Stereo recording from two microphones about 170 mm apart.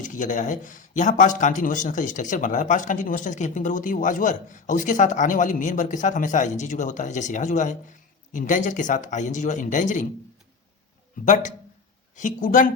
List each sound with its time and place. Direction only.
0.0 s speech: 50° left (ahead or behind)
12.1 s speech: 50° left (ahead or behind)